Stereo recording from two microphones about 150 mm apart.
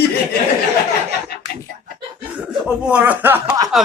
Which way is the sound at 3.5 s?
25° right (ahead or behind).